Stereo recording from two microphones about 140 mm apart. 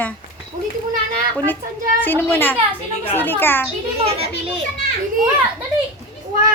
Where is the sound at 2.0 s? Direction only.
15° left (ahead or behind).